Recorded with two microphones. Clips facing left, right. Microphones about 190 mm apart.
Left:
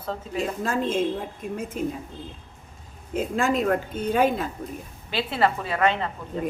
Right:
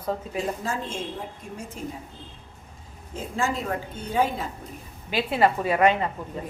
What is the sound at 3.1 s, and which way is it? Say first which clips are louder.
A woman's voice: left 5 dB; 80° left.